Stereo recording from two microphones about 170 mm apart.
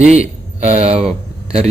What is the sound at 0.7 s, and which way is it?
Speech, 40° right (ahead or behind).